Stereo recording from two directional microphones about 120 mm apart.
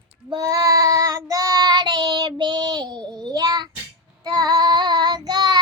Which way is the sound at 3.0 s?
5° left (ahead or behind).